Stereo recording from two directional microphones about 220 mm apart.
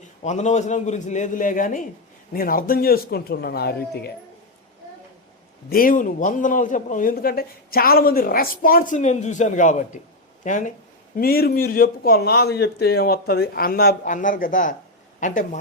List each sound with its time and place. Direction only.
0.2 s a man's voice: 35° left (ahead or behind)
5.6 s a man's voice: 40° left (ahead or behind)